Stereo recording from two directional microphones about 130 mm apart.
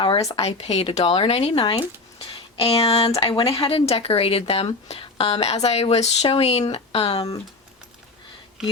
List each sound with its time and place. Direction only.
0.3 s a woman's voice: 50° left (ahead or behind)